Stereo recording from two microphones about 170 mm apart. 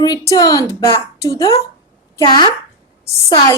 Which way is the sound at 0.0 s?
20° left (ahead or behind).